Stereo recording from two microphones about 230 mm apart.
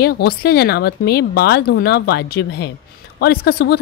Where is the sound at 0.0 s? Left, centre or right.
Left.